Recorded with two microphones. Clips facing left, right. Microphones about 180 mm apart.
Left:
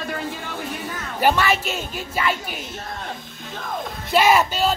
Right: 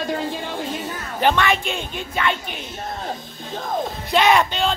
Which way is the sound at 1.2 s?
5° left (ahead or behind).